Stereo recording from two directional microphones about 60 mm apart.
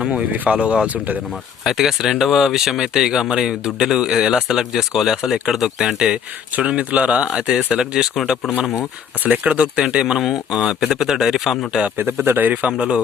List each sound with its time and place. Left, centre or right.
0.0 s speech: centre
1.6 s speech: centre
9.2 s speech: right; by 11.5 s centre
11.9 s speech: right